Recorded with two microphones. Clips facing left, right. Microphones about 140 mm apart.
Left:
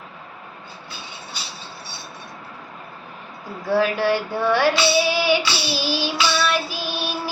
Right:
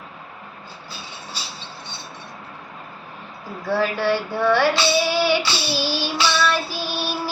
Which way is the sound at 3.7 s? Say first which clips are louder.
Left 1 dB; 15° left (ahead or behind).